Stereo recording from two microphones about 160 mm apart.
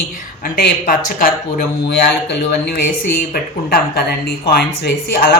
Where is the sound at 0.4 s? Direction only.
75° left (ahead or behind).